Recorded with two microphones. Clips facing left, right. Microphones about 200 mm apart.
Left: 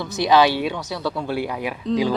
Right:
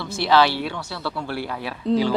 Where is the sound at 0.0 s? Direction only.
20° left (ahead or behind).